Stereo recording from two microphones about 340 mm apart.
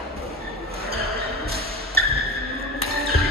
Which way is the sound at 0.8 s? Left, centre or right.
Right.